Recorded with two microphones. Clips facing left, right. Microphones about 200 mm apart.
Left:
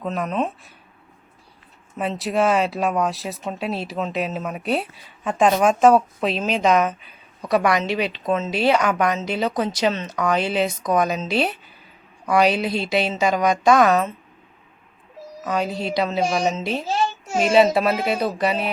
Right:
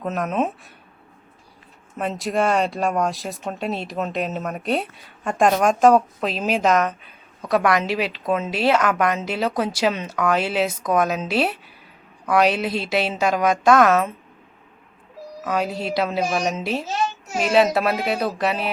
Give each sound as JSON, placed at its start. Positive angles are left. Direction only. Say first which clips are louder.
{"t": 0.0, "sound": "speech", "louder": "right 1 dB", "side_deg": -5}
{"t": 2.0, "sound": "speech", "louder": "left 1 dB", "side_deg": 5}
{"t": 15.4, "sound": "speech", "louder": "even", "side_deg": -5}
{"t": 16.8, "sound": "a sound", "louder": "left 2 dB", "side_deg": 30}
{"t": 17.4, "sound": "speech", "louder": "left 2 dB", "side_deg": 0}